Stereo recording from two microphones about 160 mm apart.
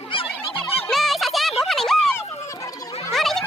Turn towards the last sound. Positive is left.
turn(degrees=0)  # may be behind; listen again after turning